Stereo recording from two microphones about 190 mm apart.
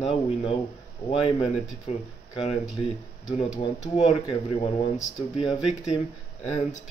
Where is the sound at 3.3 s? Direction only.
30° left (ahead or behind).